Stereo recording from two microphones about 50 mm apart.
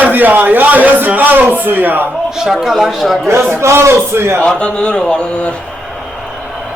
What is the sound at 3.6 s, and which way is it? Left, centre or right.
Speech, right.